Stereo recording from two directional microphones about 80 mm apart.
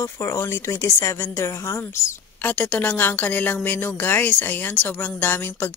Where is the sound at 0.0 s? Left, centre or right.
Left.